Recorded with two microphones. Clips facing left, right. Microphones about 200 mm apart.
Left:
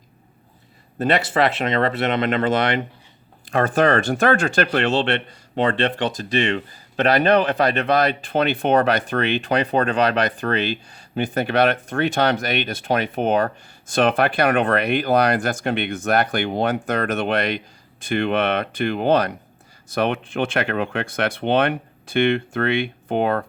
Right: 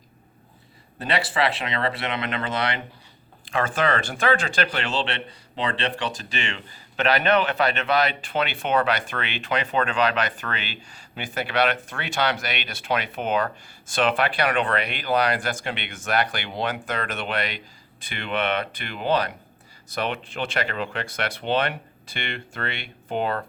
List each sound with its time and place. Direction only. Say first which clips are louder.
0.9 s speech: left 6 dB; 45° left (ahead or behind)
6.9 s a man's voice: left 4 dB; 40° left (ahead or behind)
11.1 s speech: left 7 dB; 50° left (ahead or behind)